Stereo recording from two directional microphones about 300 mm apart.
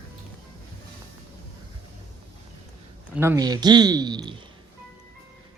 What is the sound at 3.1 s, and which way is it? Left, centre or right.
Speech, centre.